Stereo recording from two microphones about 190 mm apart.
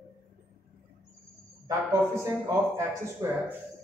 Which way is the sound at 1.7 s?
15° right (ahead or behind).